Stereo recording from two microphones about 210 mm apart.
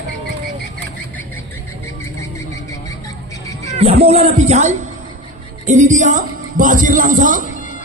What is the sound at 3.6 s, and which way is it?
A woman's voice, 30° right (ahead or behind).